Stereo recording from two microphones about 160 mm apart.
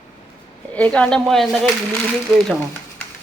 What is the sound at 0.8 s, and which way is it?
Speech, 5° left (ahead or behind).